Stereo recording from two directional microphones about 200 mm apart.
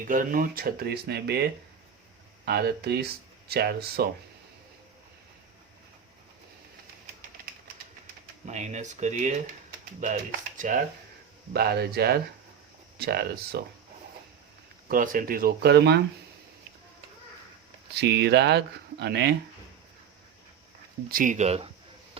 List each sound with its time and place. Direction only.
0.0 s speech: 45° right (ahead or behind)
8.4 s speech: 35° right (ahead or behind)
11.5 s speech: 50° right (ahead or behind)
14.8 s speech: 45° right (ahead or behind)
17.9 s speech: 55° right (ahead or behind)
21.1 s speech: 40° right (ahead or behind)